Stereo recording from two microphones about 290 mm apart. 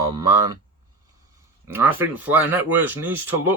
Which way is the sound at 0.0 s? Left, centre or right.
Centre.